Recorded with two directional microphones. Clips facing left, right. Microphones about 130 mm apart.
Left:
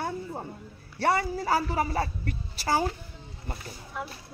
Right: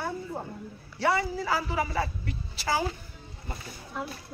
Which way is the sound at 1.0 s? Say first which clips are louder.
Left 1 dB; 50° left (ahead or behind).